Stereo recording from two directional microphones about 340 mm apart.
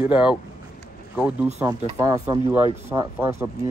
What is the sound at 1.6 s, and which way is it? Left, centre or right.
Speech, centre.